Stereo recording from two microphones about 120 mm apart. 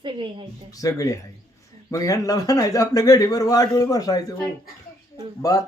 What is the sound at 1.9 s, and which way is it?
Speech, 30° left (ahead or behind).